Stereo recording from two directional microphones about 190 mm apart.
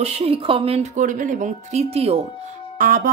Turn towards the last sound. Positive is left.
turn(degrees=-50)  # may be behind; listen again after turning